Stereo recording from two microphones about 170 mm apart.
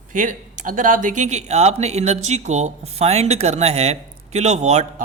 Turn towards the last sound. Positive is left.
turn(degrees=-40)  # may be behind; listen again after turning